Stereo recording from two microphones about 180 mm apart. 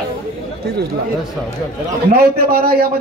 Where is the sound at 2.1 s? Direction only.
60° right (ahead or behind).